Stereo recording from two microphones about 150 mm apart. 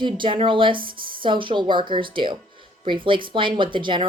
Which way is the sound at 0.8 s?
70° right (ahead or behind).